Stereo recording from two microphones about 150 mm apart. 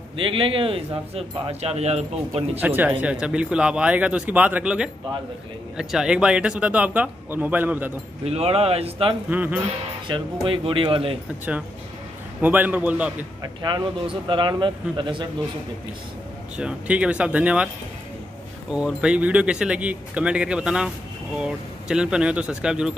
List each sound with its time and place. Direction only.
0.2 s speech: 35° right (ahead or behind)
2.6 s speech: 10° right (ahead or behind)
8.3 s speech: 40° right (ahead or behind)
9.3 s speech: 10° right (ahead or behind)
10.0 s speech: 35° right (ahead or behind)
12.4 s speech: 10° right (ahead or behind)
13.4 s speech: 30° right (ahead or behind)
16.5 s speech: 5° right (ahead or behind)
18.7 s speech: 5° right (ahead or behind)